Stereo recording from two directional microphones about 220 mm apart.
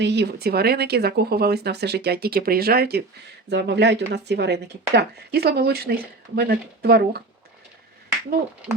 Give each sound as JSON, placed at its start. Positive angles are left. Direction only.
{"t": 0.0, "sound": "speech", "side_deg": -50}